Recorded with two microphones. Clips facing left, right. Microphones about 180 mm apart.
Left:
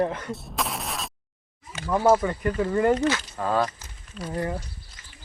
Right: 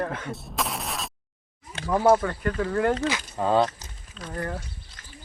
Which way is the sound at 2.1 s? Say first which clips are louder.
Even; 5° left (ahead or behind).